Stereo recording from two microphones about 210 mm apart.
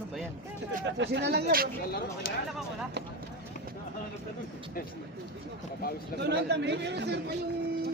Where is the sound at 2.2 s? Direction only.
45° left (ahead or behind).